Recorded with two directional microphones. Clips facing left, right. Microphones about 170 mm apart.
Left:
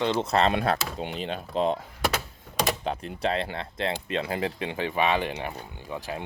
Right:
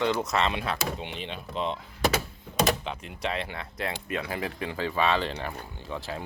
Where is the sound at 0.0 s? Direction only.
25° left (ahead or behind).